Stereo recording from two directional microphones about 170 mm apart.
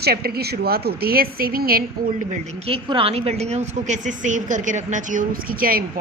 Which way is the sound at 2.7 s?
35° right (ahead or behind).